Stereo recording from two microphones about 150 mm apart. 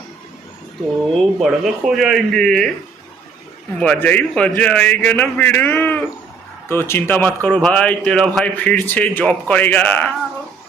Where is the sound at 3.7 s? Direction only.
10° left (ahead or behind).